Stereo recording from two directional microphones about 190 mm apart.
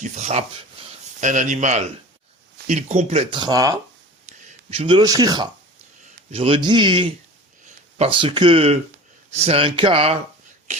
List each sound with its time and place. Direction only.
0.0 s speech: 35° right (ahead or behind); by 3.8 s 20° right (ahead or behind)
4.3 s speech: 35° right (ahead or behind)